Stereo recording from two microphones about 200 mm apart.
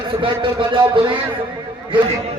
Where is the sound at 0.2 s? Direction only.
25° right (ahead or behind).